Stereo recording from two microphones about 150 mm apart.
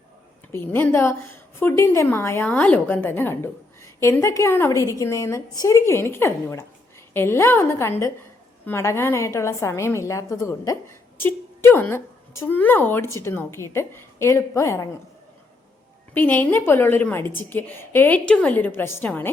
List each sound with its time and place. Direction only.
0.5 s a woman's voice: 15° left (ahead or behind)
16.1 s a woman's voice: 10° left (ahead or behind)